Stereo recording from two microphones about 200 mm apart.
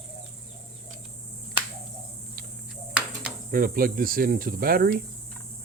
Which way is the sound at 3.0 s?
5° right (ahead or behind).